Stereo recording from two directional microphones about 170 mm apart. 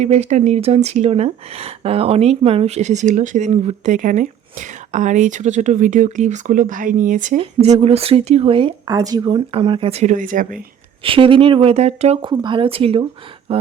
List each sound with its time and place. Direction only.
0.0 s speech: 40° right (ahead or behind)
7.3 s speech: 35° right (ahead or behind)
11.0 s speech: 30° right (ahead or behind)